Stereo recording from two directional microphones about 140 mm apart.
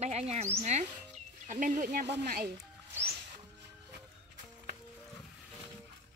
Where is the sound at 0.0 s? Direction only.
50° right (ahead or behind).